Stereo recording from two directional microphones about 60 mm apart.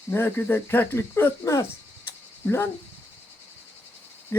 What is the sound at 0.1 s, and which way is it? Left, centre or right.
Speech, left.